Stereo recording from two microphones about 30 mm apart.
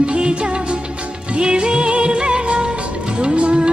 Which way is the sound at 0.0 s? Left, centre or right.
Right.